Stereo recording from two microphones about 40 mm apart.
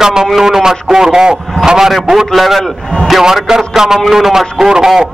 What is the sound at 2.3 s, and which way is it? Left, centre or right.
Speech, centre.